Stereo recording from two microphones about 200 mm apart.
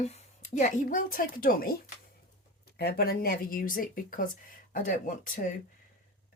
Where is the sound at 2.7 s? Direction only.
50° left (ahead or behind).